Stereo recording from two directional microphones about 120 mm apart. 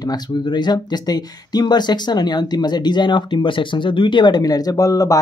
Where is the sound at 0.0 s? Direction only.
35° left (ahead or behind).